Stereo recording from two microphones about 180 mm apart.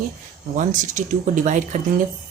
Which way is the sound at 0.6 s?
45° right (ahead or behind).